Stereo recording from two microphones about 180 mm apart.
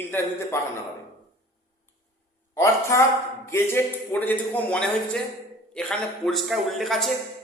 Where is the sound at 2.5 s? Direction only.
15° left (ahead or behind).